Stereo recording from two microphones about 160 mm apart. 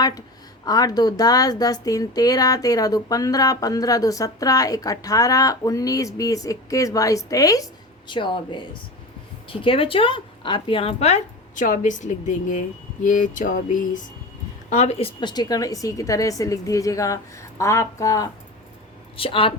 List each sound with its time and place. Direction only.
0.6 s a woman's voice: 25° left (ahead or behind); by 14.0 s 55° left (ahead or behind)
14.7 s a woman's voice: 45° left (ahead or behind); by 18.3 s 20° left (ahead or behind)
19.1 s speech: 35° left (ahead or behind)